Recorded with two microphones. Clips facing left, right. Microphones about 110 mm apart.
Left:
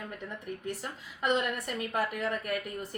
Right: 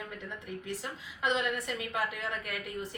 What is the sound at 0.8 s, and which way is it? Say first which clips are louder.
A woman's voice: left 1 dB; 45° left (ahead or behind).